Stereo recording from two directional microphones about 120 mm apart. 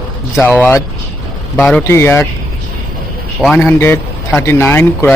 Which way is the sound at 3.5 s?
20° left (ahead or behind).